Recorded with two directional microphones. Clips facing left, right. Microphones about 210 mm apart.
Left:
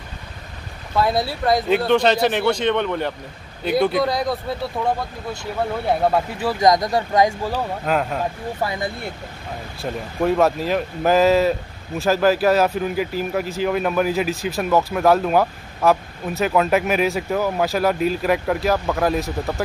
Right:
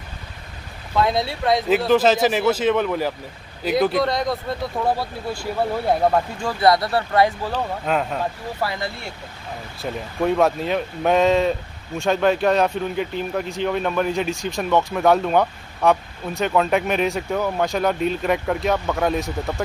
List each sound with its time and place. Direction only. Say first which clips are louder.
0.9 s speech: even; 5° left (ahead or behind)
8.5 s speech: left 1 dB; 20° left (ahead or behind)
9.8 s speech: left 1 dB; centre (ahead or behind)